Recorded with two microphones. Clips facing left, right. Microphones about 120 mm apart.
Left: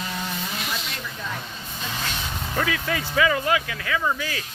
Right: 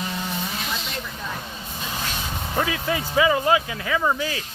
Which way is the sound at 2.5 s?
25° right (ahead or behind).